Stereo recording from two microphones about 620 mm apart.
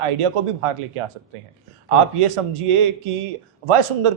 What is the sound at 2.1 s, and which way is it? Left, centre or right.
A man's voice, right.